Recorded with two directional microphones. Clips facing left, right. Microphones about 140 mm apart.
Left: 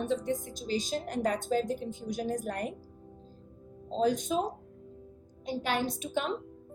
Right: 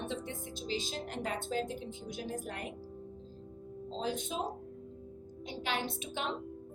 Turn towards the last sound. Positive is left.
turn(degrees=45)  # may be behind; listen again after turning